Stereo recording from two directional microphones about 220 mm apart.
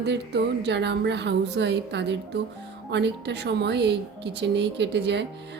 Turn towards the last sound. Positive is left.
turn(degrees=-50)  # may be behind; listen again after turning